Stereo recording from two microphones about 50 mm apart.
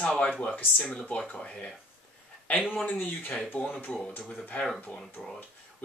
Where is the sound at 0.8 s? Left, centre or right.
Left.